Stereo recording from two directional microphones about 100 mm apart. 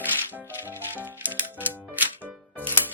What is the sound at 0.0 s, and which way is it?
Music, 20° right (ahead or behind).